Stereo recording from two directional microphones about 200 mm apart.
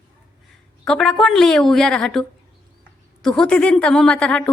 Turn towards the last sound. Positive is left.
turn(degrees=5)  # may be behind; listen again after turning